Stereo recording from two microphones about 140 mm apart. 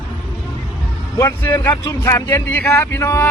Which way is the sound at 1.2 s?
20° left (ahead or behind).